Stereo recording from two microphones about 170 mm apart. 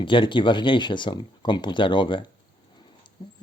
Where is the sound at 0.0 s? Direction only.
30° left (ahead or behind).